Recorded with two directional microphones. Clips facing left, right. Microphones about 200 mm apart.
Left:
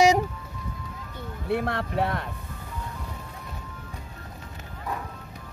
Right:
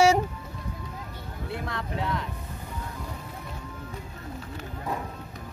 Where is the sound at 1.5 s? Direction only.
60° left (ahead or behind).